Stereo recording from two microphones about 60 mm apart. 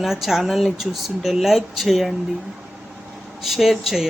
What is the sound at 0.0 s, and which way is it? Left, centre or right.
A woman's voice, centre.